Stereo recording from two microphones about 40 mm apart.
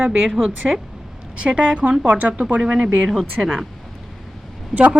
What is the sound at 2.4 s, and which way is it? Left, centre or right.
Speech, centre.